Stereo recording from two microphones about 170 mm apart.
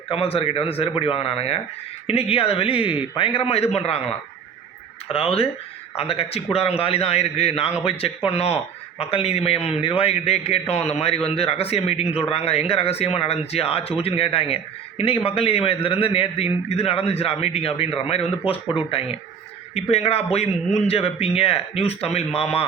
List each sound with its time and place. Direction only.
0.1 s speech: 35° left (ahead or behind)
5.0 s speech: 35° left (ahead or behind)